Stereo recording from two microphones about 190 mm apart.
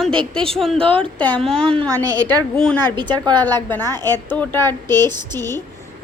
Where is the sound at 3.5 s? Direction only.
10° left (ahead or behind).